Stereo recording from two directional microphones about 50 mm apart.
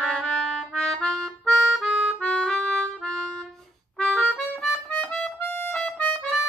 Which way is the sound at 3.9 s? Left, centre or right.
Centre.